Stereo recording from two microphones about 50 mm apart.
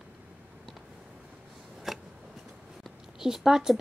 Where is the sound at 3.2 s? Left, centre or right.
Centre.